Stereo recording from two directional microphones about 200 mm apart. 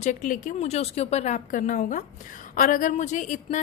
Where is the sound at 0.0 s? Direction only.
40° left (ahead or behind).